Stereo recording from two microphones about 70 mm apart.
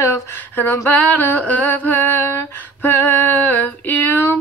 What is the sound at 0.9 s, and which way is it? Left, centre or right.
A woman's voice, left.